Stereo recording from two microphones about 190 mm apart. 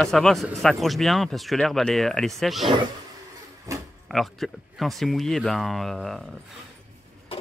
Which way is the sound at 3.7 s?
15° right (ahead or behind).